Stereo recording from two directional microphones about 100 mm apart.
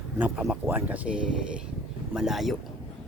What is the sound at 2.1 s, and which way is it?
Speech, 5° right (ahead or behind).